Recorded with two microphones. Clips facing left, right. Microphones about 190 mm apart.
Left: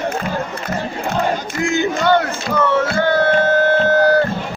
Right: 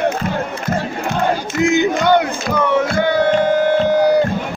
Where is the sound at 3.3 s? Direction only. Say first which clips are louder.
Right 1 dB; 15° right (ahead or behind).